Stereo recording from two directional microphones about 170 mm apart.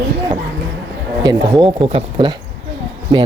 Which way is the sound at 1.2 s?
25° right (ahead or behind).